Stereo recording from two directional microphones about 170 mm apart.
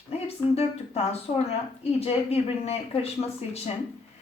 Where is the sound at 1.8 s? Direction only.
35° left (ahead or behind).